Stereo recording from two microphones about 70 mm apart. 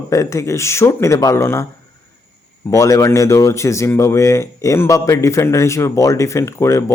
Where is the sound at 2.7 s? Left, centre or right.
Left.